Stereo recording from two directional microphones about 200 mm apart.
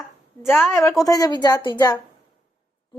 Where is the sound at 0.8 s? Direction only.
15° left (ahead or behind).